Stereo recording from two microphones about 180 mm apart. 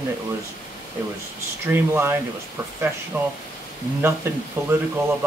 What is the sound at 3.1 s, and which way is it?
Speech, 10° right (ahead or behind).